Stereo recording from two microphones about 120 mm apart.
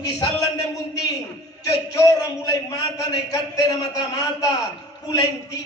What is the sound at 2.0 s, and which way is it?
A man's voice, 30° left (ahead or behind).